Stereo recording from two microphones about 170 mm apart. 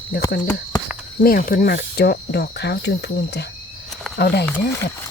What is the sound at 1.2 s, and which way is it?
Speech, 60° left (ahead or behind).